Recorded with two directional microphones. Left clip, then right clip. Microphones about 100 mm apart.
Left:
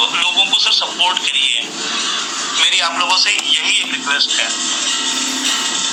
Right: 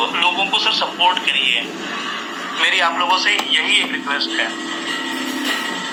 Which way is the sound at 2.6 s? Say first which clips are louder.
Left 1 dB; 25° left (ahead or behind).